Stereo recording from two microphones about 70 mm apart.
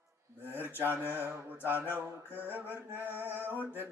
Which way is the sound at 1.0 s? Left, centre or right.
Right.